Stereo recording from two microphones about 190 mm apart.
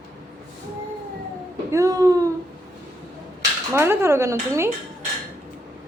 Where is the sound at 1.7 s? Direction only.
15° right (ahead or behind).